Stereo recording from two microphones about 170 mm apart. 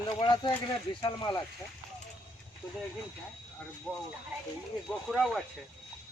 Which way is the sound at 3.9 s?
5° left (ahead or behind).